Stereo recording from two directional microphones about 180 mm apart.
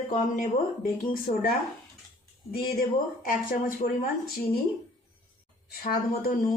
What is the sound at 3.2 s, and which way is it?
Speech, 50° left (ahead or behind).